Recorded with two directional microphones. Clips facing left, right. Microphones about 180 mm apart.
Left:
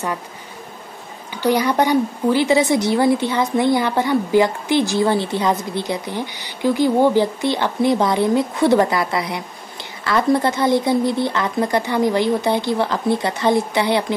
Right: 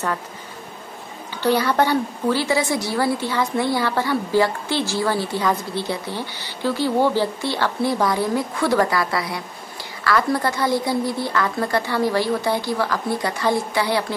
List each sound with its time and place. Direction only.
1.3 s a woman's voice: 15° left (ahead or behind)